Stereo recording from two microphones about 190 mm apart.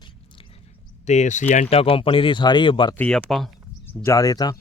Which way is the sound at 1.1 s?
40° left (ahead or behind).